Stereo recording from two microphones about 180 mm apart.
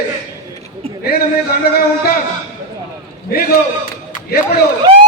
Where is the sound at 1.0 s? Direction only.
60° left (ahead or behind).